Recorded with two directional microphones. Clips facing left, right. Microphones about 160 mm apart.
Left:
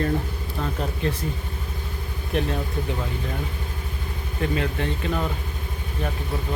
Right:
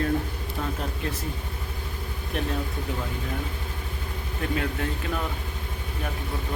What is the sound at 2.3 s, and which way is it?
Speech, centre (ahead or behind).